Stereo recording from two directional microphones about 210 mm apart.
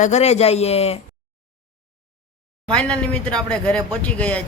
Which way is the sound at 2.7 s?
5° left (ahead or behind).